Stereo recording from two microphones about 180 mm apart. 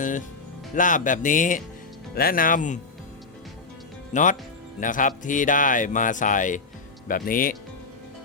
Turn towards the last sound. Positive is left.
turn(degrees=50)  # may be behind; listen again after turning